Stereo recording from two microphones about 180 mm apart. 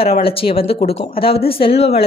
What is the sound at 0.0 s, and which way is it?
A woman's voice, 30° left (ahead or behind).